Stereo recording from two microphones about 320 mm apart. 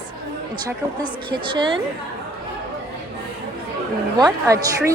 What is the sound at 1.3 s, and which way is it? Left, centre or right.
Speech, centre.